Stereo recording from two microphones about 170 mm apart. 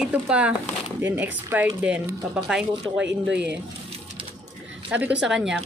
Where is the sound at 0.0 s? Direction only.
5° right (ahead or behind).